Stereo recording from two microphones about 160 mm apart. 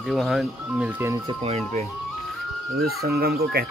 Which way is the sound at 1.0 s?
15° right (ahead or behind).